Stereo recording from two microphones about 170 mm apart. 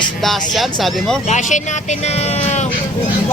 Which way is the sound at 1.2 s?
45° left (ahead or behind).